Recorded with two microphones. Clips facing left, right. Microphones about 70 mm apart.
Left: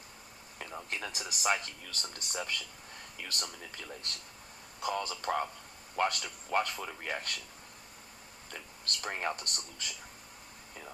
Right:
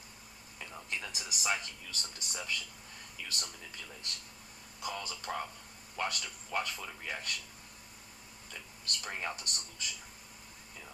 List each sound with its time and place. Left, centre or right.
0.9 s speech: left
8.4 s speech: left